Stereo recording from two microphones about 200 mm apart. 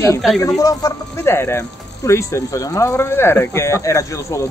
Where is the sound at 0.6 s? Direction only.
15° left (ahead or behind).